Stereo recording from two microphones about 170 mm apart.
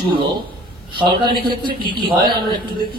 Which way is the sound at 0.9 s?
30° right (ahead or behind).